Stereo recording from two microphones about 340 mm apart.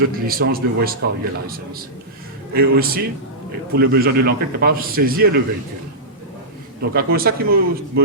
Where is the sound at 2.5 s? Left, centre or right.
Right.